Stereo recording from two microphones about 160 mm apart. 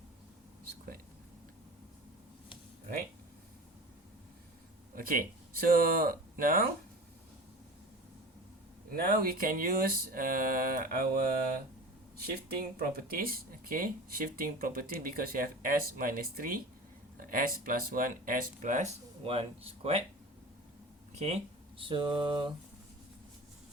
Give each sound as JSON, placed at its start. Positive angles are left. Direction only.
{"t": 4.9, "sound": "speech", "side_deg": -60}
{"t": 8.9, "sound": "speech", "side_deg": -65}
{"t": 12.8, "sound": "speech", "side_deg": -65}
{"t": 21.2, "sound": "speech", "side_deg": -40}